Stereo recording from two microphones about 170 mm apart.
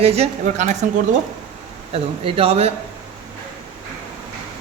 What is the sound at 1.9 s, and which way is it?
Speech, 35° right (ahead or behind).